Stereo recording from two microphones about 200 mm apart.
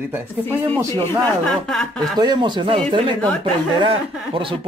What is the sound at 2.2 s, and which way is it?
Speech, 20° right (ahead or behind).